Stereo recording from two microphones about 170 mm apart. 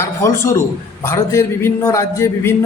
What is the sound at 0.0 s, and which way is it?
A man's voice, 15° left (ahead or behind).